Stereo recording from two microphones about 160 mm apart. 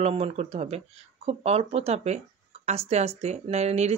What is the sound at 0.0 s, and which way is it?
Speech, 40° right (ahead or behind).